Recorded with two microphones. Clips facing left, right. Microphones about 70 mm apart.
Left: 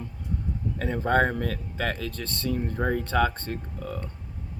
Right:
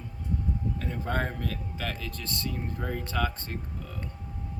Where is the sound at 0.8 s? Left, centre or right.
Left.